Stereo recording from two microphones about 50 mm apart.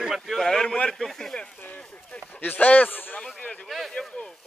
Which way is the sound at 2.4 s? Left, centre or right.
Left.